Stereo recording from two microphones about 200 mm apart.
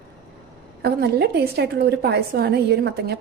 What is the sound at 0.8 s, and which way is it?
A woman's voice, 55° right (ahead or behind).